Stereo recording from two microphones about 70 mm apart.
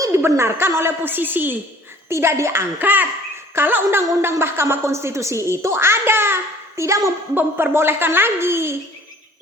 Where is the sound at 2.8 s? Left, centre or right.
Right.